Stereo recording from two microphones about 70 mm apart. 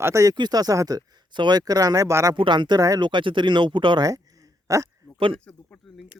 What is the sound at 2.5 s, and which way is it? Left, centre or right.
Speech, right.